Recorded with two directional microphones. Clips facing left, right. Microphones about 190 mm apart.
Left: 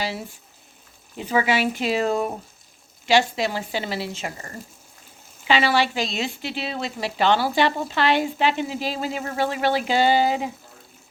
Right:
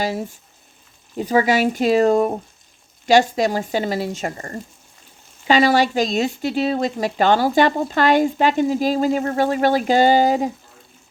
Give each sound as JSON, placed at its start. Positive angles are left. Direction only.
{"t": 0.0, "sound": "speech", "side_deg": -45}